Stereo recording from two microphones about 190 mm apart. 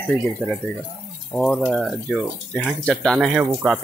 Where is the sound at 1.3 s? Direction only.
5° left (ahead or behind).